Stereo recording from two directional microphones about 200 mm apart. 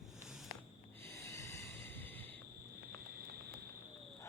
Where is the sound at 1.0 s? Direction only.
15° left (ahead or behind).